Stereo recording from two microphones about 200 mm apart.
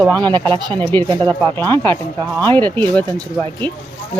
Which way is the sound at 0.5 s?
25° right (ahead or behind).